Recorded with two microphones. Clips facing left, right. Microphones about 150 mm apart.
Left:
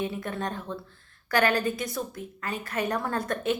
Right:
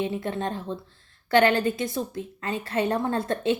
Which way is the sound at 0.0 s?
25° right (ahead or behind).